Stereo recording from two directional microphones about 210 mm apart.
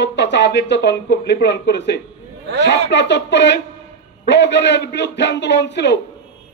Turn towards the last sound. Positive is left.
turn(degrees=55)  # may be behind; listen again after turning